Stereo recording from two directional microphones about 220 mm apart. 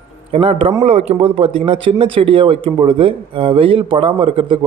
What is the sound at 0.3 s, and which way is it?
Speech, 25° right (ahead or behind).